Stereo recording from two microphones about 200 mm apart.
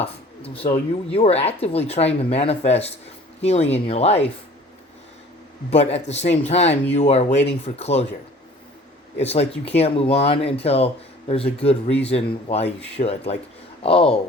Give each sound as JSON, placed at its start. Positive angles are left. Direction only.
{"t": 0.0, "sound": "speech", "side_deg": 30}
{"t": 5.7, "sound": "speech", "side_deg": 35}
{"t": 9.1, "sound": "speech", "side_deg": 30}